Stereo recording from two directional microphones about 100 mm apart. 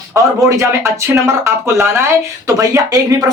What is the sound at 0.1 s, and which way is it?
Speech, 25° right (ahead or behind).